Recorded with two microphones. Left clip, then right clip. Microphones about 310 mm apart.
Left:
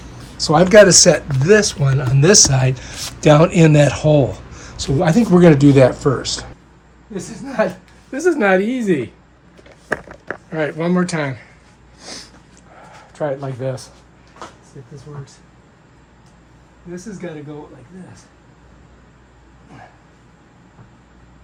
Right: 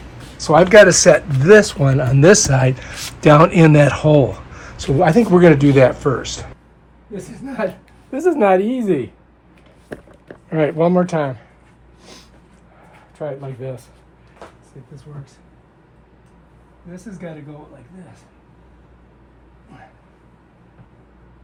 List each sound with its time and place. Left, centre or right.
0.3 s speech: centre
1.6 s speech: left
2.0 s speech: centre
7.6 s speech: centre
8.1 s a woman's voice: centre
10.5 s speech: right
10.8 s a woman's voice: centre
12.0 s snort: left
13.1 s speech: left
17.2 s speech: centre